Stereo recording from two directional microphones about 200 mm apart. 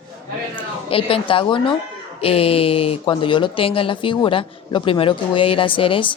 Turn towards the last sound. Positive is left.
turn(degrees=25)  # may be behind; listen again after turning